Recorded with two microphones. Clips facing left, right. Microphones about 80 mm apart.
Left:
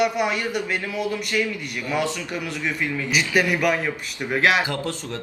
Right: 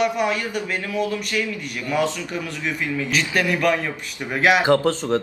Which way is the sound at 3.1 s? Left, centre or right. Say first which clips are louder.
Left 1 dB; centre.